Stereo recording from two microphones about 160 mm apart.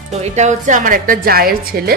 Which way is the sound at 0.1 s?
45° right (ahead or behind).